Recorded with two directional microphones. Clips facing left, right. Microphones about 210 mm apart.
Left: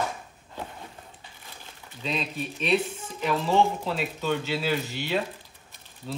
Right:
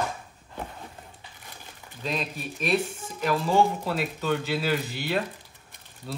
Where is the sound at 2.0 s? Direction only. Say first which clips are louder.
Left 1 dB; 5° right (ahead or behind).